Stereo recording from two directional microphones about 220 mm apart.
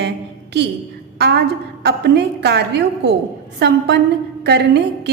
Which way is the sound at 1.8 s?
50° right (ahead or behind).